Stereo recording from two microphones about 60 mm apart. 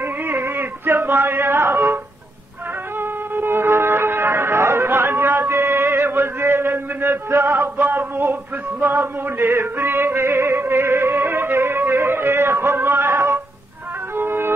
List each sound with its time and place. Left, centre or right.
0.0 s a sound: right
3.0 s music: right
7.7 s male singing: right
14.1 s music: right